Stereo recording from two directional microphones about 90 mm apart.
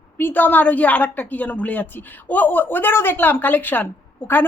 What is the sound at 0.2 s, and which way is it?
A woman's voice, 20° left (ahead or behind).